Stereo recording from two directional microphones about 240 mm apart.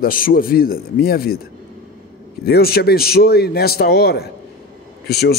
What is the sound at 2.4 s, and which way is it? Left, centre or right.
A man's voice, left.